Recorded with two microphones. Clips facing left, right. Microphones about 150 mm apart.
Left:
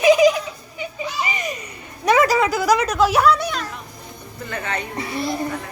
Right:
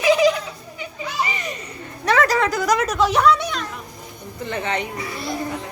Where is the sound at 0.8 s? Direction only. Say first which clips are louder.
Even; 20° left (ahead or behind); by 3.7 s centre (ahead or behind).